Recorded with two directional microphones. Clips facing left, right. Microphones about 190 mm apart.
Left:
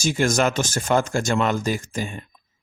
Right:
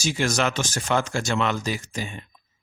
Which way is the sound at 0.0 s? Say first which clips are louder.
Left 4 dB; 50° left (ahead or behind).